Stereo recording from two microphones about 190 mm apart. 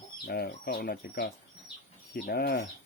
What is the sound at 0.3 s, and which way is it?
Speech, 55° left (ahead or behind).